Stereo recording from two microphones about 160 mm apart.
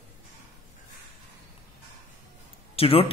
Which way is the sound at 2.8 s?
35° left (ahead or behind).